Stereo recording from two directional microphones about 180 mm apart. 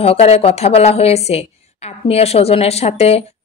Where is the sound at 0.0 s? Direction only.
35° left (ahead or behind).